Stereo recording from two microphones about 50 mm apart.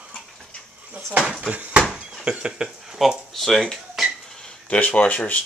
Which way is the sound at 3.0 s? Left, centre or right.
Centre.